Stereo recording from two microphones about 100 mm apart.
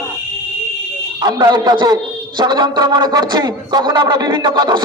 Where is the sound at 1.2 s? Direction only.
40° right (ahead or behind).